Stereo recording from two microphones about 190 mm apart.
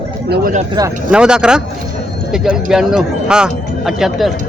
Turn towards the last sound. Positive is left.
turn(degrees=0)  # may be behind; listen again after turning